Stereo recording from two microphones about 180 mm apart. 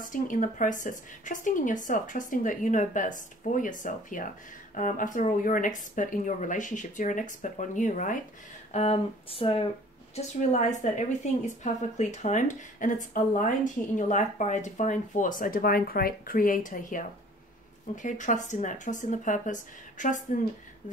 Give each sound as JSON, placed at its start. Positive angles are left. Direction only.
{"t": 0.0, "sound": "a woman's voice", "side_deg": 45}
{"t": 8.7, "sound": "speech", "side_deg": 35}
{"t": 10.1, "sound": "a woman's voice", "side_deg": 40}